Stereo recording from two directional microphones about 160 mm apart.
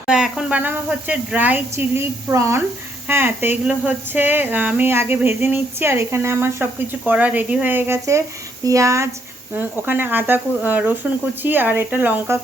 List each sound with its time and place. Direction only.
0.1 s speech: 5° right (ahead or behind)